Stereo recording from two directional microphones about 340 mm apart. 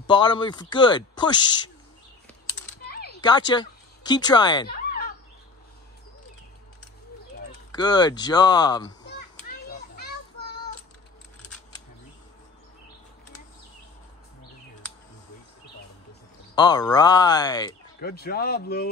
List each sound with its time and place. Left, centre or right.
0.0 s speech: centre
2.9 s a sound: left
3.2 s speech: centre
4.6 s a sound: left
7.7 s speech: centre
16.5 s speech: centre
18.0 s speech: left